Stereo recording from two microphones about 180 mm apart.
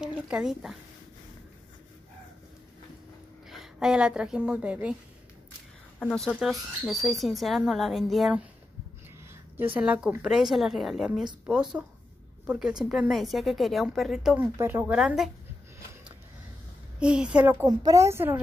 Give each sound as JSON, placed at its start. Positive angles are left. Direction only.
{"t": 0.0, "sound": "speech", "side_deg": -5}
{"t": 3.4, "sound": "a woman's voice", "side_deg": -5}
{"t": 5.9, "sound": "a woman's voice", "side_deg": 5}
{"t": 9.8, "sound": "a woman's voice", "side_deg": -5}
{"t": 12.4, "sound": "a woman's voice", "side_deg": -5}
{"t": 17.0, "sound": "a woman's voice", "side_deg": -5}